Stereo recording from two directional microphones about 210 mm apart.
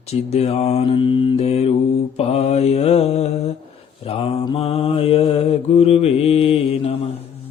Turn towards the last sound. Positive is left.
turn(degrees=25)  # may be behind; listen again after turning